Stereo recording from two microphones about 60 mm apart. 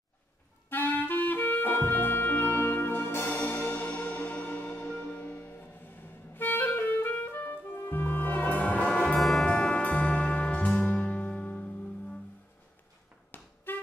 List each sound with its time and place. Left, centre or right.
0.7 s clarinet: left
3.8 s music: left
5.6 s clarinet: left
8.9 s brass instrument: centre
9.2 s music: centre
9.5 s music: left
13.3 s vehicle: left